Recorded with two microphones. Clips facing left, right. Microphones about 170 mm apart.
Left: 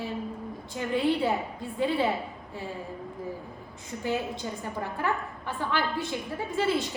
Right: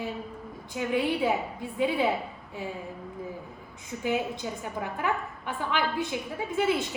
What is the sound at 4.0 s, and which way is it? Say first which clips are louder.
A woman's voice: right 1 dB; 10° right (ahead or behind).